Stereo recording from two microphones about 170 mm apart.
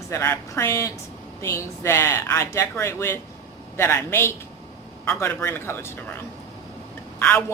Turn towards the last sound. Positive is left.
turn(degrees=10)  # may be behind; listen again after turning